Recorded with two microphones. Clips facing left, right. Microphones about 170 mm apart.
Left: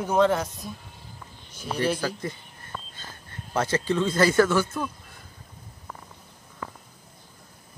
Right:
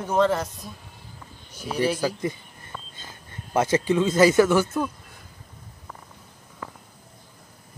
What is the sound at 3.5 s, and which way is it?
Speech, 15° right (ahead or behind).